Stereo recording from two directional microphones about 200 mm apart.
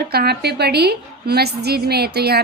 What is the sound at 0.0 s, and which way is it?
A woman's voice, 50° right (ahead or behind).